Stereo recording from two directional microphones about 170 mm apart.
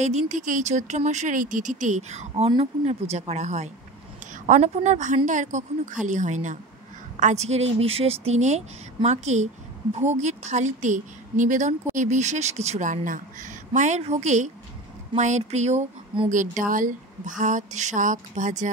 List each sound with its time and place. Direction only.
0.0 s a woman's voice: 45° right (ahead or behind)